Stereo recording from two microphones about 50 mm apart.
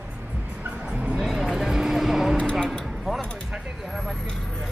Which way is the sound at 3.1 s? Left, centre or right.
Centre.